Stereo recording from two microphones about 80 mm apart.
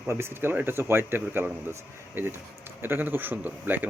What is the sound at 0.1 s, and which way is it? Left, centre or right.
Speech, right.